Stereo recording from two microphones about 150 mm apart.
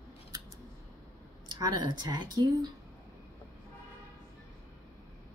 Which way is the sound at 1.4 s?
30° right (ahead or behind).